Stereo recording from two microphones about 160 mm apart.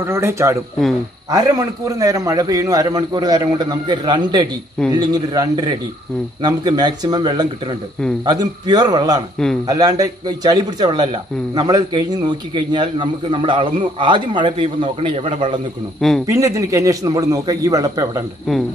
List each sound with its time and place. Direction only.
0.0 s a man's voice: 15° right (ahead or behind); by 15.6 s 35° right (ahead or behind)
16.3 s a man's voice: 20° right (ahead or behind)